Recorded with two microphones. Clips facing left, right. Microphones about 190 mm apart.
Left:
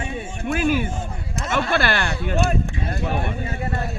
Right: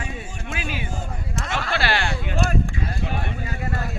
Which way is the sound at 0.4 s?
50° left (ahead or behind).